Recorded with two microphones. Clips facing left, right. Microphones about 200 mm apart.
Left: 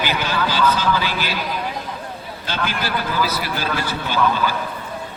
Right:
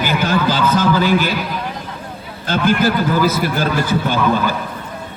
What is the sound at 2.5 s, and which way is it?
A man's voice, 50° right (ahead or behind).